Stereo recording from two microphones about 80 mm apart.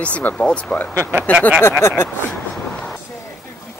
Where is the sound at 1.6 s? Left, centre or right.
Left.